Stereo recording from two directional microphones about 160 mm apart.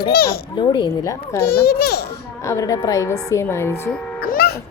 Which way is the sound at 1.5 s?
80° left.